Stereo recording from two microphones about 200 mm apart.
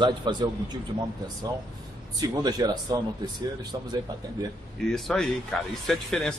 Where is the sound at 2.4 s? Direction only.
20° right (ahead or behind).